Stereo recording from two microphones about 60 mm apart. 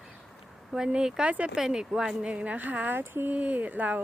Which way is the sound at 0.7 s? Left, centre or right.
Centre.